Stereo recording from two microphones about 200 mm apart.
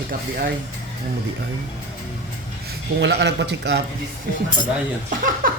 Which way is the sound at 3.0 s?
60° right (ahead or behind).